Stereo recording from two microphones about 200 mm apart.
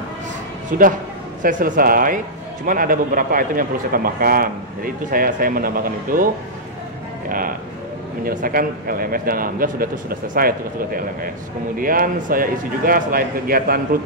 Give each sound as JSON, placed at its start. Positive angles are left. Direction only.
{"t": 0.7, "sound": "speech", "side_deg": -45}
{"t": 11.8, "sound": "speech", "side_deg": -45}